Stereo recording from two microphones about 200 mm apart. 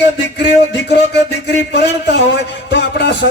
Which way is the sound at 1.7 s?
55° left (ahead or behind).